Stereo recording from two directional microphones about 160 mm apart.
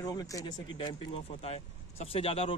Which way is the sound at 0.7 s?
35° left (ahead or behind).